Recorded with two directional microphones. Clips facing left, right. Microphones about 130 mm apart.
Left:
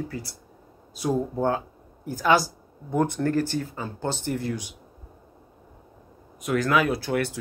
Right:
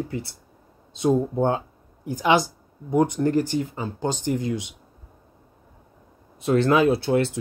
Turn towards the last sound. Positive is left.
turn(degrees=-25)  # may be behind; listen again after turning